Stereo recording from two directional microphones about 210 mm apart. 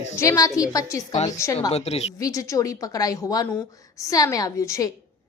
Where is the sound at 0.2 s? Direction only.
15° left (ahead or behind).